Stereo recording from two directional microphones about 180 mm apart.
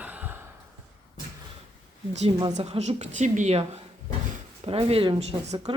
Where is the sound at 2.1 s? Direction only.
35° right (ahead or behind).